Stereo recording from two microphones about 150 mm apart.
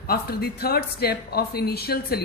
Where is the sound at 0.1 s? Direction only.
90° left.